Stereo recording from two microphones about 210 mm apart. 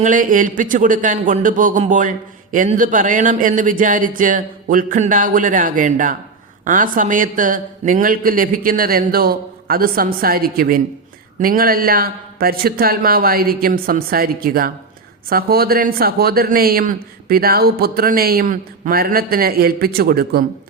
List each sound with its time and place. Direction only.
0.0 s speech: 40° right (ahead or behind)